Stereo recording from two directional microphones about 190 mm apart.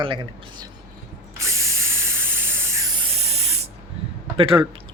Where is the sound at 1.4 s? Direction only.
15° right (ahead or behind).